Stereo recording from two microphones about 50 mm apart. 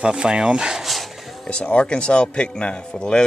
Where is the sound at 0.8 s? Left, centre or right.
Centre.